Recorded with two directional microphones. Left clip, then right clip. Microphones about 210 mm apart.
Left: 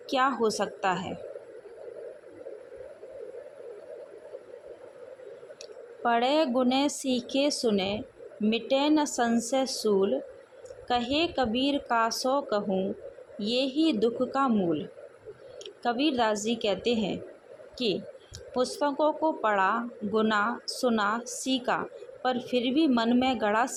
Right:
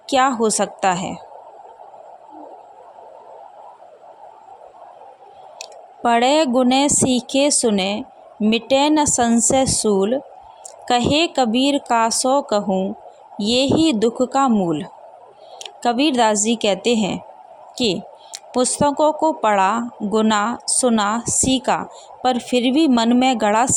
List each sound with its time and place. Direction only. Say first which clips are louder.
0.1 s speech: right 9 dB; 50° right (ahead or behind)
5.5 s speech: right 7 dB; 50° right (ahead or behind)